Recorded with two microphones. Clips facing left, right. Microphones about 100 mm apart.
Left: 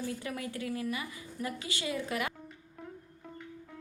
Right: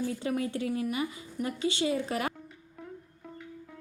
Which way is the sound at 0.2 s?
25° right (ahead or behind).